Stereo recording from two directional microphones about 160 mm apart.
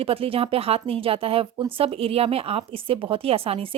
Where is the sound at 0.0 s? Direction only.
35° right (ahead or behind).